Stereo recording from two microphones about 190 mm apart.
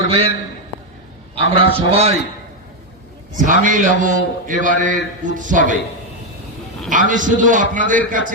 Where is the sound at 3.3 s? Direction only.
45° right (ahead or behind).